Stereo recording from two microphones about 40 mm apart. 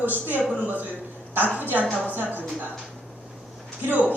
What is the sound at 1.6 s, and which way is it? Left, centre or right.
Speech, right.